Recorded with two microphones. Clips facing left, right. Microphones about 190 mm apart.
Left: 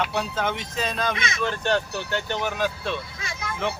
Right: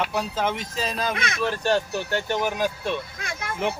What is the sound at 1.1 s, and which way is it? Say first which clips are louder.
Speech: right 1 dB; 60° right (ahead or behind).